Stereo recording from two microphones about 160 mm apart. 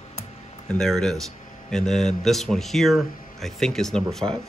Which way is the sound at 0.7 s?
5° left (ahead or behind).